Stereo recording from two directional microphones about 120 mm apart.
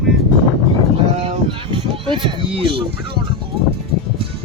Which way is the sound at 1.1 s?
55° right (ahead or behind).